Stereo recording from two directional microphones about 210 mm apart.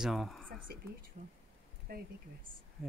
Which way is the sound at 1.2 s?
35° right (ahead or behind).